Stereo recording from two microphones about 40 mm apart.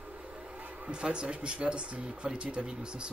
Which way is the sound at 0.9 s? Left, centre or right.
Right.